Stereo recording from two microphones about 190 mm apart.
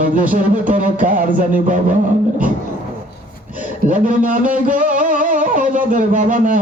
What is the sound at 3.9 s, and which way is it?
Music, 45° right (ahead or behind).